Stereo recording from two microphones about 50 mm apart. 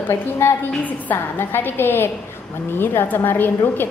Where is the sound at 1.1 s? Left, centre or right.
Left.